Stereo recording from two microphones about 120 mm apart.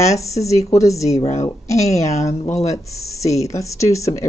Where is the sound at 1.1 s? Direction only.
70° left (ahead or behind).